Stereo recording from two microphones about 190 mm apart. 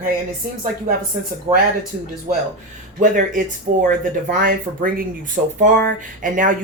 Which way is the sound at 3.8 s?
45° right (ahead or behind).